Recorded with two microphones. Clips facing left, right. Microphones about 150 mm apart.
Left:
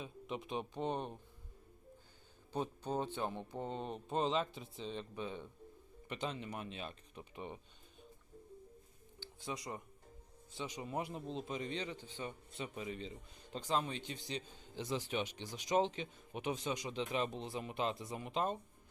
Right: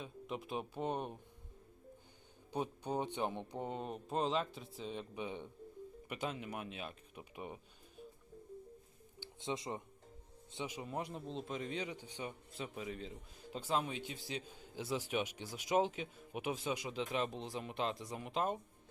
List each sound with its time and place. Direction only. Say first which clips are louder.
0.0 s a man's voice: even; centre (ahead or behind)
2.5 s speech: even; 10° right (ahead or behind)
9.2 s speech: right 3 dB; 25° right (ahead or behind)
10.8 s a man's voice: left 4 dB; centre (ahead or behind)
12.5 s a man's voice: left 1 dB; centre (ahead or behind)